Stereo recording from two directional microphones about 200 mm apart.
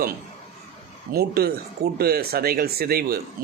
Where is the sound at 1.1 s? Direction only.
50° right (ahead or behind).